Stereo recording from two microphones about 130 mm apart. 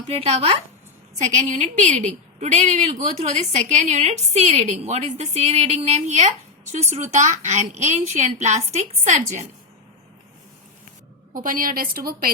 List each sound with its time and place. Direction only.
0.1 s speech: 55° right (ahead or behind)
1.3 s a woman's voice: 65° right (ahead or behind)
11.3 s a woman's voice: 90° right